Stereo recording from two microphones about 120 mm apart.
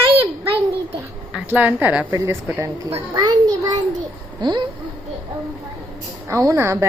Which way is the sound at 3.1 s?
35° right (ahead or behind).